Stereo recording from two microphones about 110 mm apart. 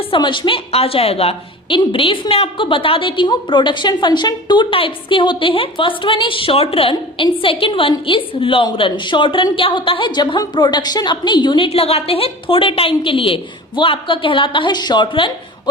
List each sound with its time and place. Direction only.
0.1 s a woman's voice: 45° left (ahead or behind)
11.7 s a woman's voice: 65° left (ahead or behind); by 15.7 s 45° left (ahead or behind)